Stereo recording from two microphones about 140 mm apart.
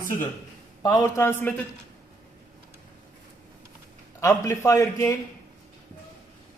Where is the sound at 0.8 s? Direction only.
30° left (ahead or behind); by 1.6 s 15° left (ahead or behind).